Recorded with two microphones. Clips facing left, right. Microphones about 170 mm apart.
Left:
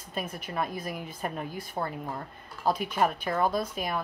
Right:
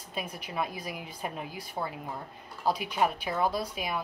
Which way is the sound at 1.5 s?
50° left (ahead or behind).